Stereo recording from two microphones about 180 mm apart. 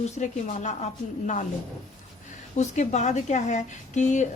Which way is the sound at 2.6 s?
40° left (ahead or behind).